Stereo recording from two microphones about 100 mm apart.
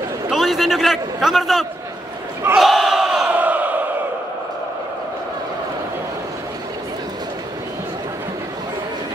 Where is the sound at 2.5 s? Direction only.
Centre (ahead or behind).